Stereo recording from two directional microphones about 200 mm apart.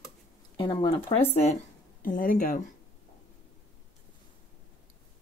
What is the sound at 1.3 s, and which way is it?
Speech, 35° left (ahead or behind).